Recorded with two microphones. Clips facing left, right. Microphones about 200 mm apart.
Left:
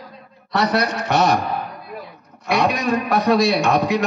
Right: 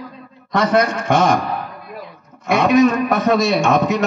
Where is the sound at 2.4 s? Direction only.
50° right (ahead or behind).